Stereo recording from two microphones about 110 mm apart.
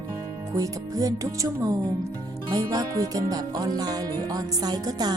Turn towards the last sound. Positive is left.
turn(degrees=-35)  # may be behind; listen again after turning